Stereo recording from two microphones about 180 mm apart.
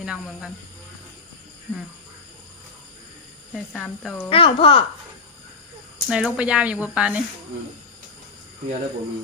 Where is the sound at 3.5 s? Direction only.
Centre (ahead or behind).